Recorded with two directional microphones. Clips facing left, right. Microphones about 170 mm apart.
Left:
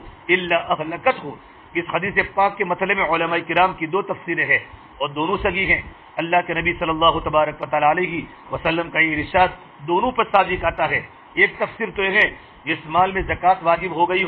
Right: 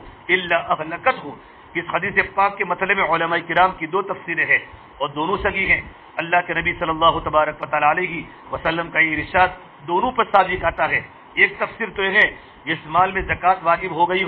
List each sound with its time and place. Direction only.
0.3 s a man's voice: 20° left (ahead or behind)
4.9 s a man's voice: 5° left (ahead or behind)
5.4 s a man's voice: 25° left (ahead or behind)
10.1 s a man's voice: 15° left (ahead or behind)
10.9 s a man's voice: 25° left (ahead or behind)
13.0 s a man's voice: 25° left (ahead or behind)
13.9 s a man's voice: 5° left (ahead or behind)